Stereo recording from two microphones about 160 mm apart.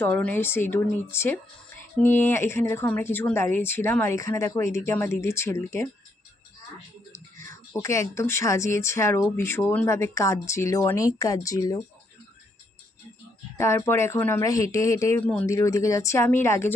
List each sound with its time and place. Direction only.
0.0 s a woman's voice: 10° left (ahead or behind)
7.1 s music: 20° left (ahead or behind)
7.8 s a woman's voice: 20° left (ahead or behind)
13.6 s a woman's voice: 15° left (ahead or behind)